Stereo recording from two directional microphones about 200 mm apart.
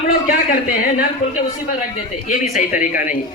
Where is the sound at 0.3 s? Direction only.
45° left (ahead or behind).